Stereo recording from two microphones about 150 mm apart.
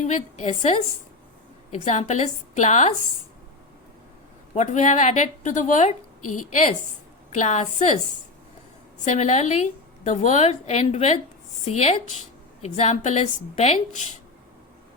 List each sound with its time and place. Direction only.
0.0 s a woman's voice: 55° left (ahead or behind)
4.5 s a woman's voice: 55° left (ahead or behind)
7.3 s a woman's voice: 50° left (ahead or behind)
9.0 s a woman's voice: 50° left (ahead or behind)